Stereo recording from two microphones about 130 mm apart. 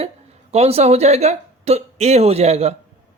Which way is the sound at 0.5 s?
55° right (ahead or behind).